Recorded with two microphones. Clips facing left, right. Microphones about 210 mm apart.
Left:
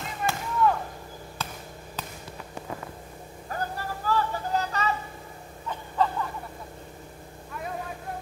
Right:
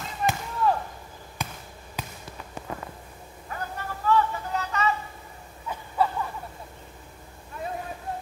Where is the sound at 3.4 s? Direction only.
35° left (ahead or behind).